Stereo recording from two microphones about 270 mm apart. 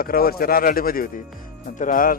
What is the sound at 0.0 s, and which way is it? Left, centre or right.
Speech, left.